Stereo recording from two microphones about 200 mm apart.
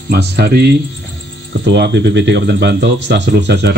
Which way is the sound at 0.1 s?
55° right (ahead or behind).